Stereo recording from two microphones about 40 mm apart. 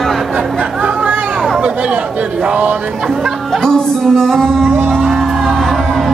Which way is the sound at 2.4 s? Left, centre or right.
Right.